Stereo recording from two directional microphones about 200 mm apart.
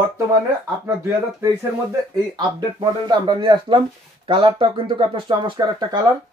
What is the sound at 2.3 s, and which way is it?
Speech, 20° right (ahead or behind).